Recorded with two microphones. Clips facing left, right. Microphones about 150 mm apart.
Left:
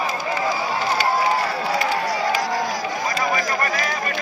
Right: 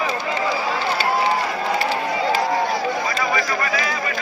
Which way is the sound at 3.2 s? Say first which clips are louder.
Even; 45° left (ahead or behind).